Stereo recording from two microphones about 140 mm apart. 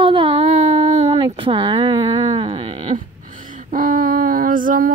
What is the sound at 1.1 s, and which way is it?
Speech, 35° right (ahead or behind).